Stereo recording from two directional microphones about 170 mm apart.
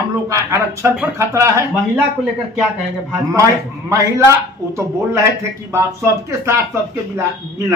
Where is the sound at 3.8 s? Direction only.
20° right (ahead or behind).